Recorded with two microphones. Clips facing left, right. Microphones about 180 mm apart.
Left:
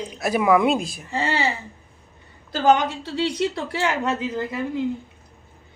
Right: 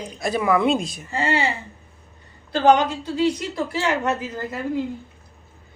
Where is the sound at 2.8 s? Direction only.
75° left (ahead or behind).